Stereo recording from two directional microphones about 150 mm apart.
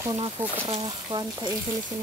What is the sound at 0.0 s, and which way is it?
Speech, 25° right (ahead or behind).